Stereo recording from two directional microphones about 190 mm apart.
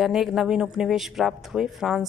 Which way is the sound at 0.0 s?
Centre (ahead or behind).